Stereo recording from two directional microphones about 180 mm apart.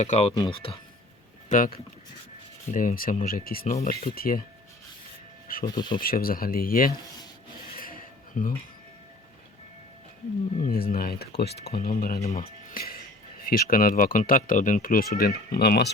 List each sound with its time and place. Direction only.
0.0 s speech: 35° left (ahead or behind)
1.5 s speech: 45° left (ahead or behind)
5.6 s speech: 25° left (ahead or behind)
6.0 s speech: 55° left (ahead or behind)
7.8 s a sound: 55° left (ahead or behind)
10.7 s speech: 55° left (ahead or behind)
11.9 s speech: 50° left (ahead or behind)
12.2 s speech: 35° left (ahead or behind)
12.7 s music: 55° left (ahead or behind)
13.4 s speech: 55° left (ahead or behind)